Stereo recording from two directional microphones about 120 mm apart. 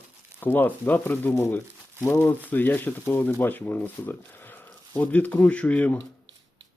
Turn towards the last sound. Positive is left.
turn(degrees=15)  # may be behind; listen again after turning